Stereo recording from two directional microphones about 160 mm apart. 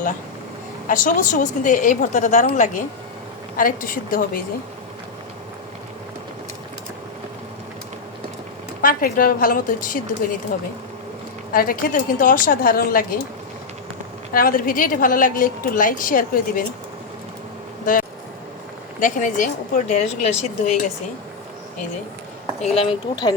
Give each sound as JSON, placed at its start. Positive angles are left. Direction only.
{"t": 0.9, "sound": "a woman's voice", "side_deg": 55}
{"t": 8.8, "sound": "a woman's voice", "side_deg": 65}
{"t": 11.5, "sound": "a woman's voice", "side_deg": 65}
{"t": 14.3, "sound": "a woman's voice", "side_deg": 60}
{"t": 18.9, "sound": "speech", "side_deg": 55}
{"t": 22.6, "sound": "speech", "side_deg": 40}